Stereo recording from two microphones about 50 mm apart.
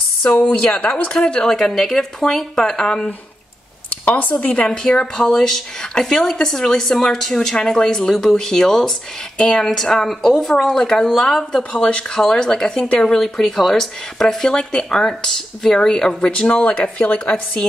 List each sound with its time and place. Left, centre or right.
0.3 s speech: centre
1.1 s a woman's voice: centre
4.1 s speech: left
4.4 s speech: left
4.8 s a woman's voice: centre
11.7 s speech: left
12.2 s a woman's voice: centre; by 17.4 s left